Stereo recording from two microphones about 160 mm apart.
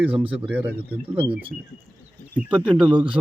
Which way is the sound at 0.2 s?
35° right (ahead or behind).